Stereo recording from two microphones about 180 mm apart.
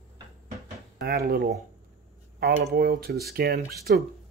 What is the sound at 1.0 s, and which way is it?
Speech, 60° right (ahead or behind).